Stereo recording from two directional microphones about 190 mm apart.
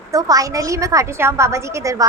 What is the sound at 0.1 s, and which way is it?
A woman's voice, 20° right (ahead or behind).